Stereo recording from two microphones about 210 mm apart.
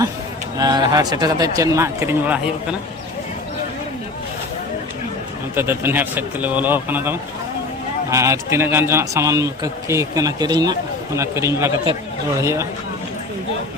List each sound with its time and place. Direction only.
0.6 s a man's voice: 20° right (ahead or behind)
5.5 s a man's voice: 10° right (ahead or behind)